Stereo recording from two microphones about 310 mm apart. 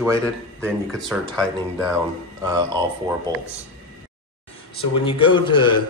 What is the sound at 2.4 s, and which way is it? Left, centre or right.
Speech, centre.